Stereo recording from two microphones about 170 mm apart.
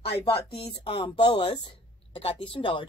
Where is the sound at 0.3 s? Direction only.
30° left (ahead or behind).